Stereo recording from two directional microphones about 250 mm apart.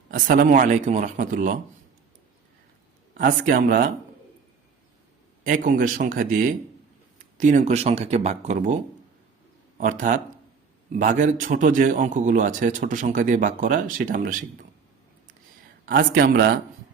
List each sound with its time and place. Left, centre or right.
0.1 s a man's voice: right
3.2 s a man's voice: right
5.4 s a man's voice: right
15.9 s a man's voice: right